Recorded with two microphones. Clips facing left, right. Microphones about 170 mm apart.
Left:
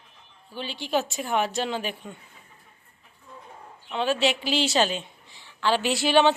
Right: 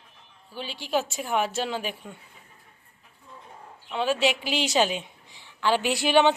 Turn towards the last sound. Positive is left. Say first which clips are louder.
# even
turn(degrees=-15)  # may be behind; listen again after turning